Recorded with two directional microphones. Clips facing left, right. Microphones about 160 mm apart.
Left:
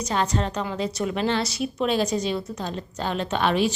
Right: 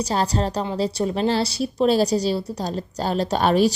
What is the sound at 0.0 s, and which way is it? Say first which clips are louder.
A woman's voice: right 3 dB; 35° right (ahead or behind).